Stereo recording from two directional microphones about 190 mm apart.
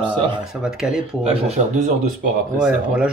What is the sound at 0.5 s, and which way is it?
Speech, 5° right (ahead or behind).